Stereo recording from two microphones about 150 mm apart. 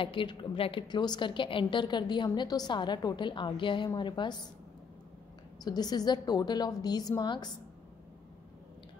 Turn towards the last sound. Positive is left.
turn(degrees=30)  # may be behind; listen again after turning